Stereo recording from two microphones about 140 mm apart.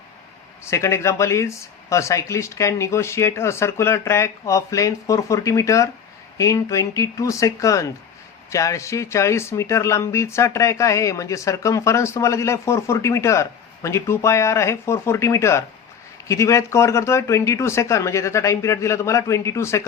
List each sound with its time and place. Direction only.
0.6 s speech: 20° left (ahead or behind)